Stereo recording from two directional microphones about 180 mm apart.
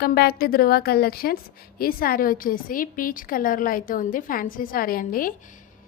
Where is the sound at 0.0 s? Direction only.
60° left (ahead or behind).